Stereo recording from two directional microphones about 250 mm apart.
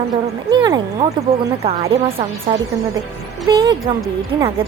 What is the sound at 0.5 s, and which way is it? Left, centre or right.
A woman's voice, centre.